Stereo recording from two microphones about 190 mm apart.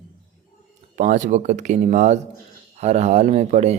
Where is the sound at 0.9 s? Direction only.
40° right (ahead or behind).